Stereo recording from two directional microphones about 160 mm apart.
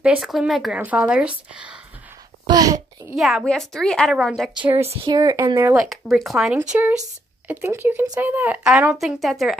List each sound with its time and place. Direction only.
0.0 s speech: 5° right (ahead or behind)
2.4 s a child's voice: 25° right (ahead or behind)
3.2 s a woman's voice: centre (ahead or behind)
5.1 s speech: 25° right (ahead or behind)
5.8 s a woman's voice: centre (ahead or behind)